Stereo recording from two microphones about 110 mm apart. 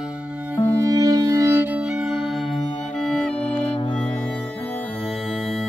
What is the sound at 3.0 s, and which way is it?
Music, 5° left (ahead or behind).